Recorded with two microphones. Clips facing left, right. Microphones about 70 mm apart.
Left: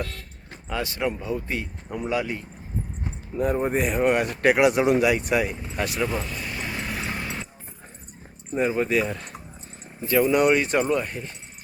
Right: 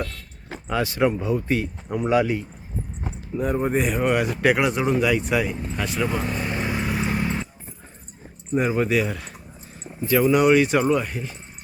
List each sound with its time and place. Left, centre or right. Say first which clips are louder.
0.7 s speech: right 5 dB; right
3.4 s speech: right 1 dB; centre
6.1 s vehicle: right 5 dB; right
6.7 s vehicle: right 5 dB; centre
8.5 s speech: right 2 dB; centre
10.2 s speech: right 2 dB; centre